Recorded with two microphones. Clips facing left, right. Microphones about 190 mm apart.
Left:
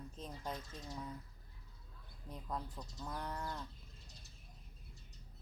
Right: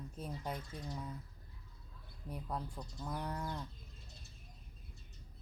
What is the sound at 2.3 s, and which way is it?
Speech, 10° right (ahead or behind).